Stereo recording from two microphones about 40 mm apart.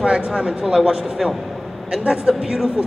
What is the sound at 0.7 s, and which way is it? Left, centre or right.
Speech, centre.